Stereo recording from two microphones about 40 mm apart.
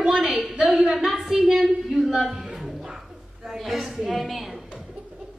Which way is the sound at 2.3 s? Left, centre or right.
Centre.